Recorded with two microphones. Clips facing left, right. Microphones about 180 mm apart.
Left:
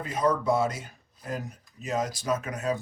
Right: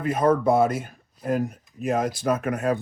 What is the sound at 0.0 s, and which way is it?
Speech, 55° right (ahead or behind).